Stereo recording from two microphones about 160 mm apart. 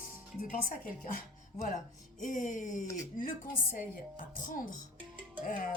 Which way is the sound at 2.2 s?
55° left (ahead or behind).